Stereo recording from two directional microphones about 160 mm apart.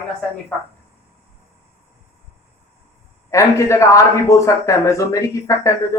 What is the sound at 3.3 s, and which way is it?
Speech, 20° left (ahead or behind).